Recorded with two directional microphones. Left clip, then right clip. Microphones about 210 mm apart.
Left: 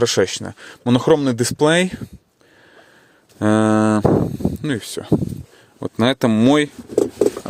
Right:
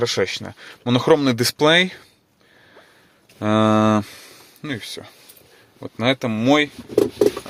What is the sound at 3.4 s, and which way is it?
Mantra, 35° left (ahead or behind).